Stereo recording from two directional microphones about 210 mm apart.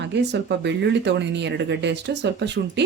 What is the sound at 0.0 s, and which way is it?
Speech, 55° right (ahead or behind).